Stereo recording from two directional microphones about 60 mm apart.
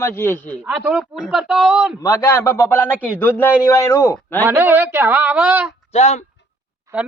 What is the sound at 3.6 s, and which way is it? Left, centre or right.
Speech, left.